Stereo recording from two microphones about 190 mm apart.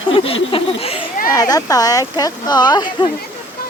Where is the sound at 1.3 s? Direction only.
20° left (ahead or behind).